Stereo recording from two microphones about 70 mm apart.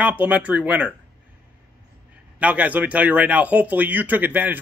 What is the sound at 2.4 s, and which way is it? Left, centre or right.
Speech, centre.